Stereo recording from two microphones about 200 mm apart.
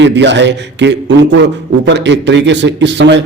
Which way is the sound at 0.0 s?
65° right (ahead or behind).